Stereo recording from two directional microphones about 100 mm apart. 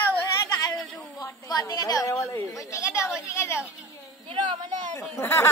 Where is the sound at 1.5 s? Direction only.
35° left (ahead or behind).